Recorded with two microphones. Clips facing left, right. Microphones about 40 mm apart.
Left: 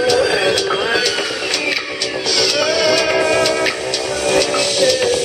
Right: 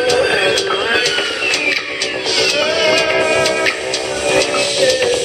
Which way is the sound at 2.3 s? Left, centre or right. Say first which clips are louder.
Right 1 dB; centre.